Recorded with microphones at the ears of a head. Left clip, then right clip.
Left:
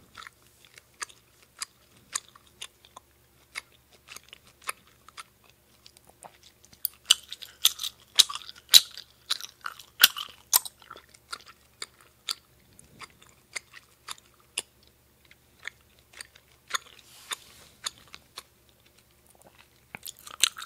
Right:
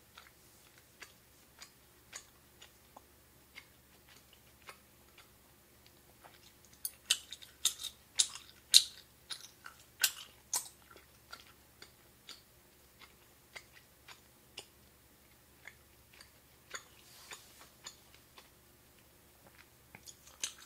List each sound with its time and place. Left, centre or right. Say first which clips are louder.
1.6 s chewing: left 16 dB; left
4.1 s chewing: left 16 dB; left
19.4 s biting: left 5 dB; left